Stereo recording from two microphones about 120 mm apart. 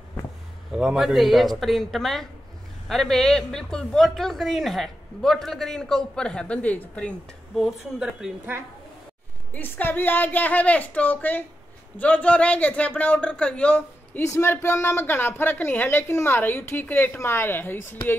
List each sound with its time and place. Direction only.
0.7 s speech: 5° right (ahead or behind)
7.5 s speech: 5° right (ahead or behind)
9.5 s speech: 15° left (ahead or behind)